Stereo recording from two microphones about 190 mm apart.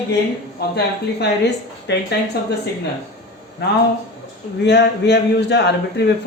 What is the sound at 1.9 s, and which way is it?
Speech, 65° left (ahead or behind).